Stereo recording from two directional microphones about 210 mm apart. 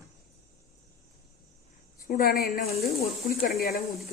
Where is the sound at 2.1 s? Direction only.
45° left (ahead or behind).